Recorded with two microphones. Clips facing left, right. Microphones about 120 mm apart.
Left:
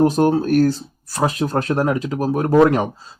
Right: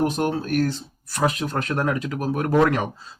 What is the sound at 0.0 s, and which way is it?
Speech, 35° left (ahead or behind).